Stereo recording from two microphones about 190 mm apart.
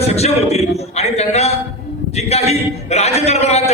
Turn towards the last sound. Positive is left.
turn(degrees=35)  # may be behind; listen again after turning